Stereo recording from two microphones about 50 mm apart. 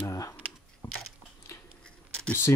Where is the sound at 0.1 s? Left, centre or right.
Left.